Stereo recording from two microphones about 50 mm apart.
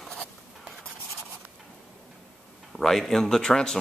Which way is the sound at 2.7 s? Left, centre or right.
Centre.